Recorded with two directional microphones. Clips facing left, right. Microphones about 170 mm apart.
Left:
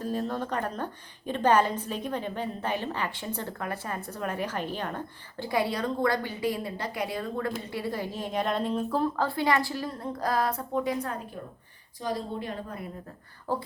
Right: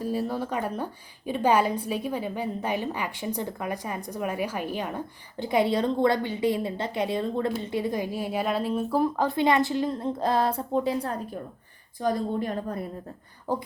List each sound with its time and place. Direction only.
0.0 s a woman's voice: 10° right (ahead or behind)
5.5 s a woman's voice: 20° right (ahead or behind)
11.9 s a woman's voice: 50° right (ahead or behind)
13.5 s a woman's voice: 15° right (ahead or behind)